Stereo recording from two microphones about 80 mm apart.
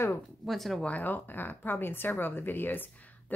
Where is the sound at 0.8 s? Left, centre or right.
Left.